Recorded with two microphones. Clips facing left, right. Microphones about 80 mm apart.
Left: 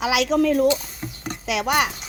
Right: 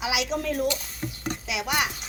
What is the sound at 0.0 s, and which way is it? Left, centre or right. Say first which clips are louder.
Speech: left 8 dB; left.